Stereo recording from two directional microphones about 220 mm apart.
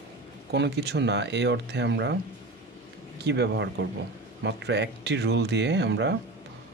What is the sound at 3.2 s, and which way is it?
Speech, 50° right (ahead or behind).